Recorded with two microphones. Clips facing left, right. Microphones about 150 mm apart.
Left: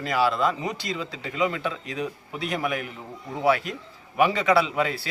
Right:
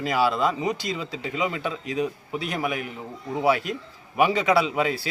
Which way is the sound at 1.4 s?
15° right (ahead or behind).